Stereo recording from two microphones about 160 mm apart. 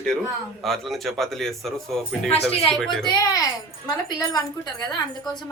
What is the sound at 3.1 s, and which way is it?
A woman's voice, 20° left (ahead or behind).